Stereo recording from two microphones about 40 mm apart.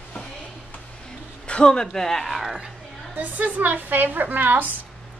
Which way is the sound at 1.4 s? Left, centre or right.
Left.